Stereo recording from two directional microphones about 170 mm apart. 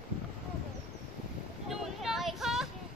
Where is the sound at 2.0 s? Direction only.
Centre (ahead or behind).